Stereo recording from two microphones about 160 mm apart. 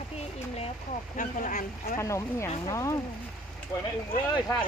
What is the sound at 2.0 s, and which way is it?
Speech, 20° left (ahead or behind).